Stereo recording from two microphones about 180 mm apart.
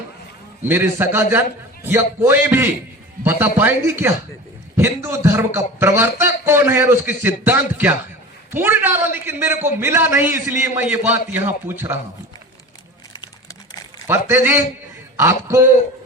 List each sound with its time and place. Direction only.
0.7 s a man's voice: 10° right (ahead or behind)
14.1 s a man's voice: 10° right (ahead or behind)